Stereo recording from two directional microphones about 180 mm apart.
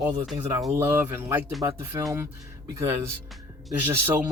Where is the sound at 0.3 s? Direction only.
15° right (ahead or behind).